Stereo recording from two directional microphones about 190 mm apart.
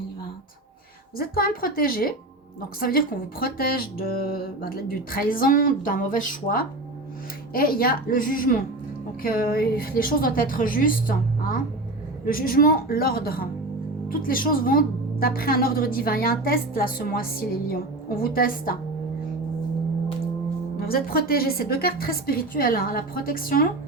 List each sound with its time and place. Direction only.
1.1 s a woman's voice: 50° left (ahead or behind)
20.8 s a woman's voice: 50° left (ahead or behind)